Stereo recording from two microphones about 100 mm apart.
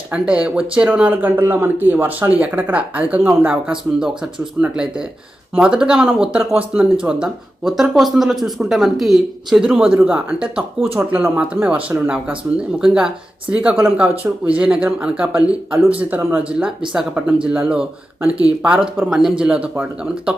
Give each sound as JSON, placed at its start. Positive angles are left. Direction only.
{"t": 0.1, "sound": "speech", "side_deg": -10}